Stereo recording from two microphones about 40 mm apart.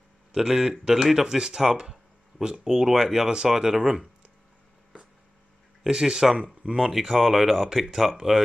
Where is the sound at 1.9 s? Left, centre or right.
Right.